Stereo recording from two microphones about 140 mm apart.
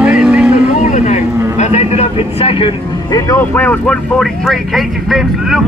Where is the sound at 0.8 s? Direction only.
60° left (ahead or behind); by 3.2 s 40° left (ahead or behind).